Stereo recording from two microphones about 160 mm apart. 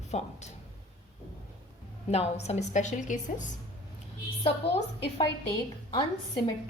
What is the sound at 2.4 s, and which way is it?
Speech, 45° left (ahead or behind).